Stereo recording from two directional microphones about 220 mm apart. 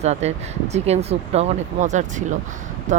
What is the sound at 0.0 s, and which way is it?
Speech, 30° right (ahead or behind).